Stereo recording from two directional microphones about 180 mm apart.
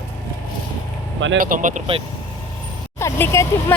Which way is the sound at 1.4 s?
45° right (ahead or behind).